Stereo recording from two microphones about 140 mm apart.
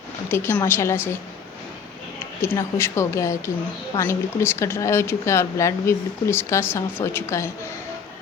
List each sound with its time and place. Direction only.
0.3 s a woman's voice: 15° left (ahead or behind)
2.4 s speech: 20° left (ahead or behind)